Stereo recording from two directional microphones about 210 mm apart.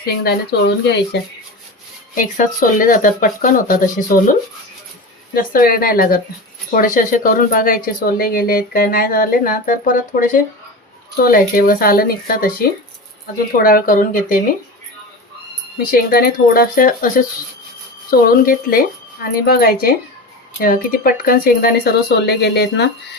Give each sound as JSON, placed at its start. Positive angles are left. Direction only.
{"t": 0.9, "sound": "speech", "side_deg": 55}
{"t": 2.1, "sound": "speech", "side_deg": 40}
{"t": 15.8, "sound": "speech", "side_deg": 45}